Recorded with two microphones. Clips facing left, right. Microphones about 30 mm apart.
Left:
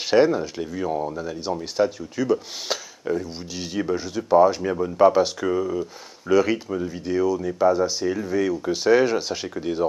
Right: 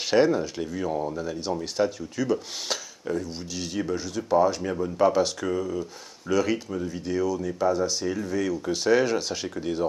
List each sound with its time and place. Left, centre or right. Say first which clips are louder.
0.1 s speech: left 3 dB; centre